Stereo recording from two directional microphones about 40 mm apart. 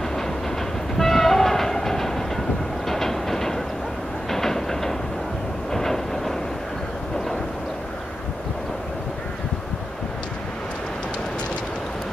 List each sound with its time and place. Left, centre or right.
0.9 s train: centre